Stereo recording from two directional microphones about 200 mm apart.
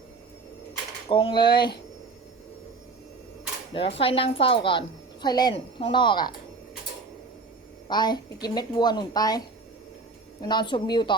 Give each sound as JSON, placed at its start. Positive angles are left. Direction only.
{"t": 1.1, "sound": "speech", "side_deg": 25}
{"t": 3.8, "sound": "speech", "side_deg": 30}
{"t": 7.9, "sound": "speech", "side_deg": 20}
{"t": 10.4, "sound": "speech", "side_deg": 20}